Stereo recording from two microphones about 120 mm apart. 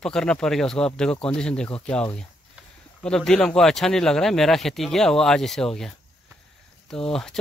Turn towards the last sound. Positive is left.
turn(degrees=5)  # may be behind; listen again after turning